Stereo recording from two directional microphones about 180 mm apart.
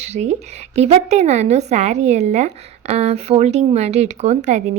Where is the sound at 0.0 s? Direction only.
40° right (ahead or behind).